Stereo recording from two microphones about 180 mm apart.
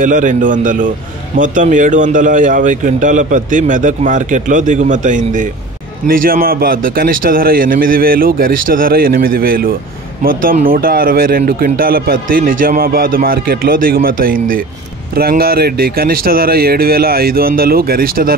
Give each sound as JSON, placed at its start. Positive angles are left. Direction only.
{"t": 0.0, "sound": "speech", "side_deg": -45}